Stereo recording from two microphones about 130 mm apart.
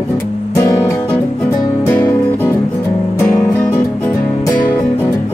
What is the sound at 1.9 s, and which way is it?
Music, 15° left (ahead or behind).